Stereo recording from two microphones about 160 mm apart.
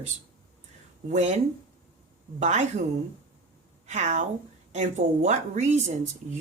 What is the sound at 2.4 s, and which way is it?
Speech, 45° right (ahead or behind).